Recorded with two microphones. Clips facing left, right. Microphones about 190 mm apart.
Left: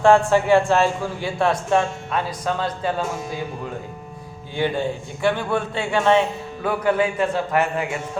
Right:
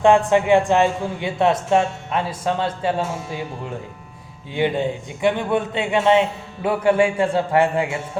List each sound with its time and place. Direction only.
0.0 s a man's voice: 20° right (ahead or behind)
4.5 s a man's voice: 20° right (ahead or behind)